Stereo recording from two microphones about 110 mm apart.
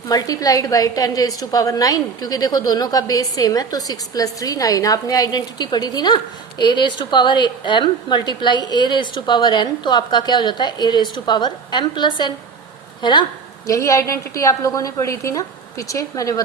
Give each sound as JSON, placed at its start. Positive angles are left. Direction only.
{"t": 0.1, "sound": "a woman's voice", "side_deg": 35}
{"t": 13.7, "sound": "a woman's voice", "side_deg": 30}